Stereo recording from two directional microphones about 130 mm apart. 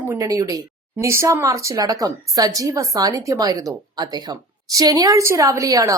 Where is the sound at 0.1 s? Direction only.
25° right (ahead or behind).